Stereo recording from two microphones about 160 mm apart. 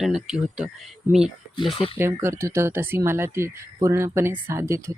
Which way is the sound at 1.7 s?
35° left (ahead or behind).